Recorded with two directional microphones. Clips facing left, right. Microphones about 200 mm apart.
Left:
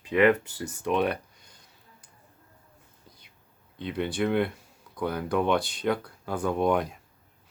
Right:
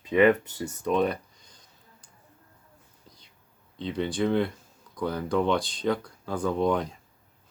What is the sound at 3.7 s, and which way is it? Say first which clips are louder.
Speech: right 1 dB; 10° left (ahead or behind).